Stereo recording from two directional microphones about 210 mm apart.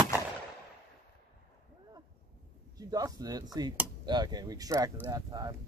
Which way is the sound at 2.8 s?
15° right (ahead or behind).